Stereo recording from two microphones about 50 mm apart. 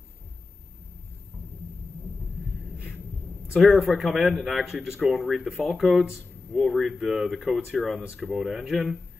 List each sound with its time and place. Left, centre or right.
3.6 s speech: centre